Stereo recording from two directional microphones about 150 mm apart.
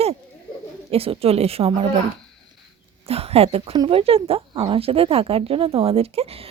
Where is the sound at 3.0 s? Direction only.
40° right (ahead or behind).